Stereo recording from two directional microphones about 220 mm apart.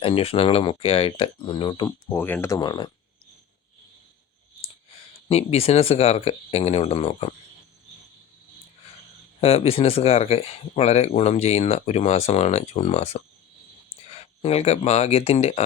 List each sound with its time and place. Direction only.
0.0 s speech: 25° left (ahead or behind)
2.1 s speech: 10° left (ahead or behind)
5.3 s speech: 25° left (ahead or behind)
9.4 s speech: 30° left (ahead or behind)